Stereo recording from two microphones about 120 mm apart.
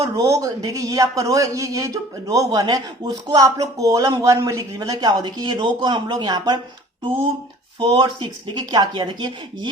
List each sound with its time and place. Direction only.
0.0 s a man's voice: 25° right (ahead or behind)
7.8 s speech: 35° right (ahead or behind)